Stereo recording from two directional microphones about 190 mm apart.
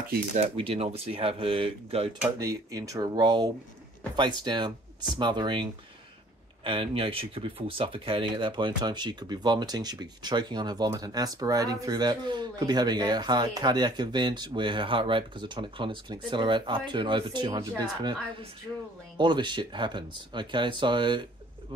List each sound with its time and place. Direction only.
0.6 s speech: 30° right (ahead or behind)
2.3 s speech: 20° right (ahead or behind)
19.1 s speech: 25° right (ahead or behind)